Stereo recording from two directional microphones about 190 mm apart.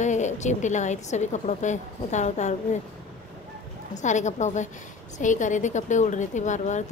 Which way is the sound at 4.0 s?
40° left (ahead or behind).